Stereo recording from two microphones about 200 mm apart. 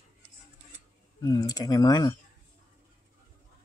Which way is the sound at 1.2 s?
20° left (ahead or behind).